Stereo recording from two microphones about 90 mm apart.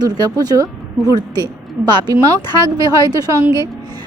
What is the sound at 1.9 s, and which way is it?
Speech, 55° right (ahead or behind).